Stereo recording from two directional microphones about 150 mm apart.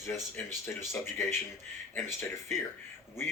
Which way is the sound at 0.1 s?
15° left (ahead or behind).